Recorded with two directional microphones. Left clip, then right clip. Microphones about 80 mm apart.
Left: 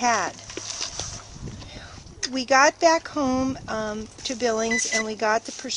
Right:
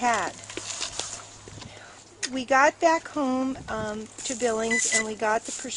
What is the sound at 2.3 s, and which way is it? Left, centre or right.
Speech, left.